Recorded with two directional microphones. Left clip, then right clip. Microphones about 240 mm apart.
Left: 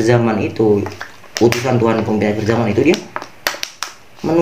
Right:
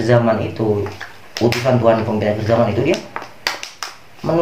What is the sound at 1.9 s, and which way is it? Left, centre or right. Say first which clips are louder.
Speech: right 1 dB; left.